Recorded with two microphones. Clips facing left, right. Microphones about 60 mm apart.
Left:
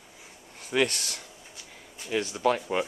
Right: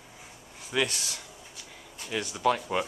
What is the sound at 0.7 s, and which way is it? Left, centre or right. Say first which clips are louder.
Speech: left 3 dB; left.